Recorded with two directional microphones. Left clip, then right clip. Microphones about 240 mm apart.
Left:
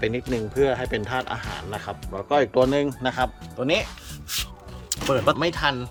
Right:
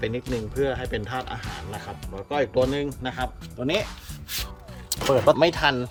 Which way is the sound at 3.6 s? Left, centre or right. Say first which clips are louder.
Left 2 dB; centre.